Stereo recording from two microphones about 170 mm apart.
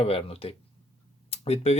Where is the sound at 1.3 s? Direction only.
40° left (ahead or behind).